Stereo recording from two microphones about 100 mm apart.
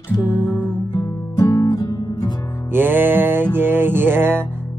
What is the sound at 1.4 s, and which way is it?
Music, 45° left (ahead or behind).